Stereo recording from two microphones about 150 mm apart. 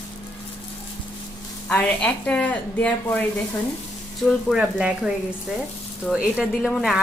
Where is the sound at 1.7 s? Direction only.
10° left (ahead or behind).